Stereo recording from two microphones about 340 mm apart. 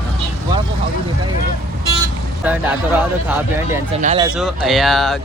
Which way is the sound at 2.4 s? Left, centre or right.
Centre.